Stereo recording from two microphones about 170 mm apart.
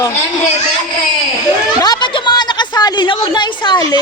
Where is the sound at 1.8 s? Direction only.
25° left (ahead or behind).